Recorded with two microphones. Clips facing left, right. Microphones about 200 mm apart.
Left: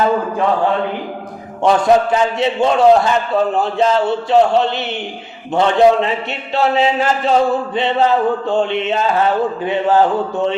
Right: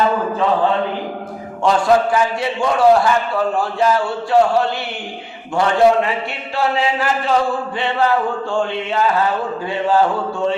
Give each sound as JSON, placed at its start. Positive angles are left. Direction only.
{"t": 1.6, "sound": "a man's voice", "side_deg": 20}